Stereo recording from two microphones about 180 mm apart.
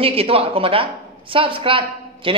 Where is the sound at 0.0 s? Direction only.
30° right (ahead or behind).